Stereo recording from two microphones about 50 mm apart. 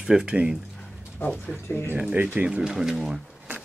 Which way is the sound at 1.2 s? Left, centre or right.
Left.